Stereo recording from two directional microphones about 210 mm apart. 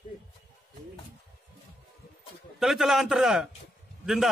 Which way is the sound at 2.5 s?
Centre (ahead or behind).